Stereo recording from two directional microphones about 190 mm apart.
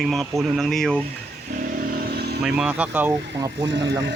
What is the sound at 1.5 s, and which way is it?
Vehicle, 50° right (ahead or behind).